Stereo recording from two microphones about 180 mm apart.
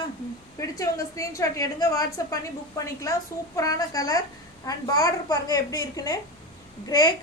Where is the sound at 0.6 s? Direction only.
15° left (ahead or behind).